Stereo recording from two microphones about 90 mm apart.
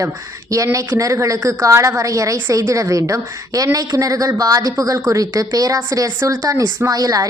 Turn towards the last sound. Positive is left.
turn(degrees=-45)  # may be behind; listen again after turning